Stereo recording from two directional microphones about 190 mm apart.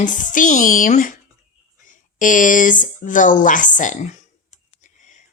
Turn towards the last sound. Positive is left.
turn(degrees=40)  # may be behind; listen again after turning